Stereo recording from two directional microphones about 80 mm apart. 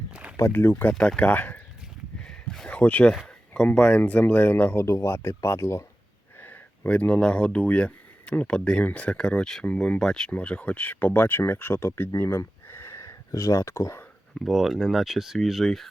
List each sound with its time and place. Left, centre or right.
0.1 s a sound: centre
0.5 s speech: left
0.9 s speech: centre
2.2 s a sound: centre
2.6 s speech: centre; by 5.8 s left
6.4 s speech: centre; by 14.0 s left
14.3 s speech: centre